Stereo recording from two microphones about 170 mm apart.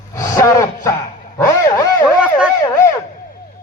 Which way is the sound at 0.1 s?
20° left (ahead or behind).